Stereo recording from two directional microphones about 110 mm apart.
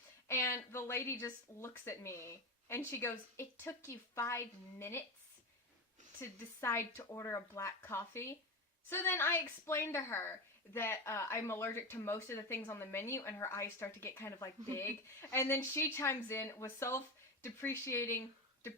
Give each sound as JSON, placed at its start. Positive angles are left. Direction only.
{"t": 0.3, "sound": "speech", "side_deg": 25}
{"t": 6.1, "sound": "speech", "side_deg": 25}
{"t": 14.3, "sound": "speech", "side_deg": 30}